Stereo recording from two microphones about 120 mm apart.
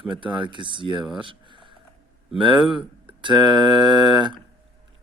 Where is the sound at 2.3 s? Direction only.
45° right (ahead or behind).